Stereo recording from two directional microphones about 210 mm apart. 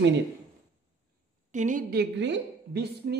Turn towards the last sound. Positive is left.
turn(degrees=-55)  # may be behind; listen again after turning